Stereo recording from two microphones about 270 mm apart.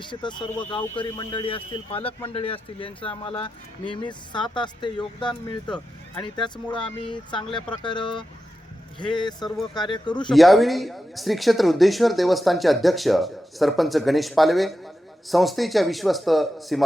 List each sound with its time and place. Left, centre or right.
0.1 s a man's voice: centre
6.7 s a man's voice: centre
10.2 s speech: centre